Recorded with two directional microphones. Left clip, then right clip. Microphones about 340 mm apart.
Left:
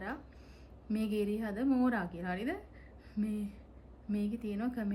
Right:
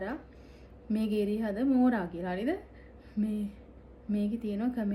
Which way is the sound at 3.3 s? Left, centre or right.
Left.